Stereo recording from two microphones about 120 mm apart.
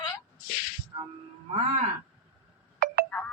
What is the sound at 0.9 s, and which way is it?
Music, 40° right (ahead or behind).